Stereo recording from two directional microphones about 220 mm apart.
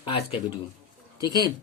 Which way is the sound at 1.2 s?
20° left (ahead or behind).